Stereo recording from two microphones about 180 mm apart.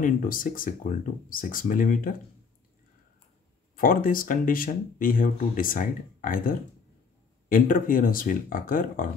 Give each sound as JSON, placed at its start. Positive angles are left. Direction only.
{"t": 0.0, "sound": "speech", "side_deg": 50}
{"t": 3.7, "sound": "speech", "side_deg": 50}